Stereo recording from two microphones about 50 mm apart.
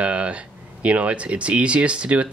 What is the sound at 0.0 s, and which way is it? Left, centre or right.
Speech, right.